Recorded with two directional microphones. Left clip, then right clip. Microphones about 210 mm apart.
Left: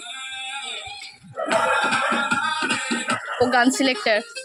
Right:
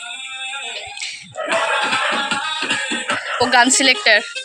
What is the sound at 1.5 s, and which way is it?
Music, 45° right (ahead or behind).